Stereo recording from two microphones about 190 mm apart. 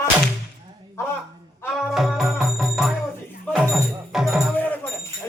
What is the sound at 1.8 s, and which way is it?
Music, centre (ahead or behind).